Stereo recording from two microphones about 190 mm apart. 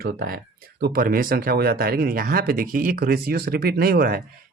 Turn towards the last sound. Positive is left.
turn(degrees=-50)  # may be behind; listen again after turning